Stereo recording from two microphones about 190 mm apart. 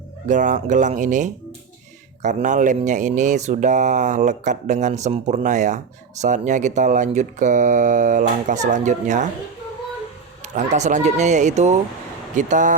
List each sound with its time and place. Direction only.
0.3 s speech: 40° right (ahead or behind)
10.4 s speech: 40° right (ahead or behind)